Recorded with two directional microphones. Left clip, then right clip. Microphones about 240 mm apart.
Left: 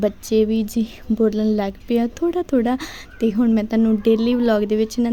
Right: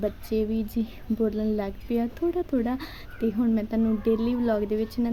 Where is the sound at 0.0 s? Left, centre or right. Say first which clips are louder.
Left 9 dB; left.